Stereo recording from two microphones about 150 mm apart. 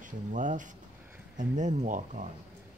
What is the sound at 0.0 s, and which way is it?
Speech, 55° right (ahead or behind).